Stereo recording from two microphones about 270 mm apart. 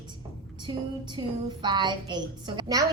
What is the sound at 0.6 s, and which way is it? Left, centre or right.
Child singing, centre.